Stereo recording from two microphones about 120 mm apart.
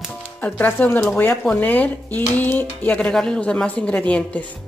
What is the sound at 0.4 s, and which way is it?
Speech, 15° left (ahead or behind).